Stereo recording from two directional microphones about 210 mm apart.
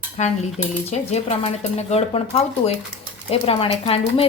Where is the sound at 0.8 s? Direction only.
30° left (ahead or behind).